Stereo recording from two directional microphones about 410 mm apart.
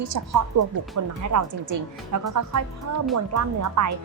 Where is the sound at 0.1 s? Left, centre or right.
Right.